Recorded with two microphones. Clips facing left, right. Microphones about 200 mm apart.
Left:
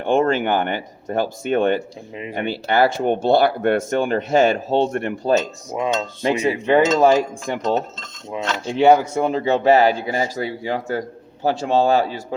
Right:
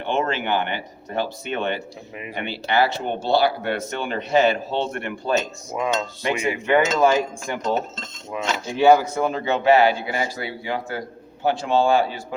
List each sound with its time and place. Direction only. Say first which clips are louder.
0.0 s speech: left 6 dB; 50° left (ahead or behind)
5.7 s speech: left 2 dB; 25° left (ahead or behind)